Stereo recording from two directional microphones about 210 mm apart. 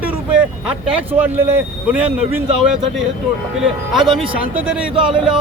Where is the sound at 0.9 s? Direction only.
10° right (ahead or behind).